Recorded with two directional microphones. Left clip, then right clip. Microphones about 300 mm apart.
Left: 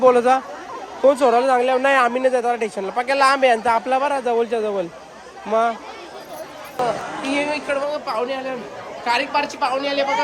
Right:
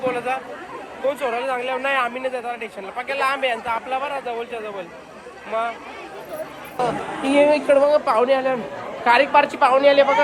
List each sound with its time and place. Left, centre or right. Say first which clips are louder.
0.0 s speech: left 9 dB; left
7.3 s a woman's voice: right 7 dB; centre